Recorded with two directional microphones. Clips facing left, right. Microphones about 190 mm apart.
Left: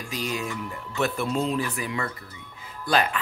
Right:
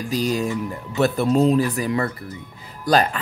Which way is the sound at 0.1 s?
35° right (ahead or behind).